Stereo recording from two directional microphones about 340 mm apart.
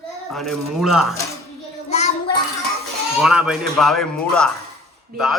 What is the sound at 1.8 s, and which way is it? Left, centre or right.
Child singing, centre.